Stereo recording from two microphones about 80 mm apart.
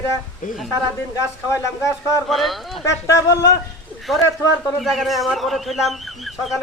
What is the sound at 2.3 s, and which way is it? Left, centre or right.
Speech, centre.